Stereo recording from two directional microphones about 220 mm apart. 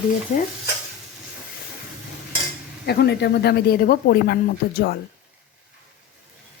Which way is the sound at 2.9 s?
45° left (ahead or behind).